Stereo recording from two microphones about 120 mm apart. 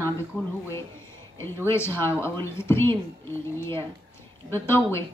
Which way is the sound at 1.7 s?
20° left (ahead or behind).